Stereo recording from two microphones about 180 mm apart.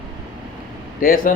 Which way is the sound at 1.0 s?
50° left (ahead or behind).